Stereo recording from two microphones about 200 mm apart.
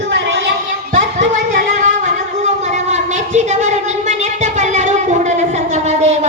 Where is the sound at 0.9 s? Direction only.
40° right (ahead or behind).